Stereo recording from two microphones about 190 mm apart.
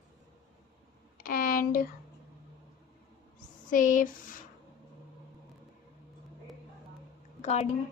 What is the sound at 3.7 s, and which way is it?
Speech, 45° left (ahead or behind).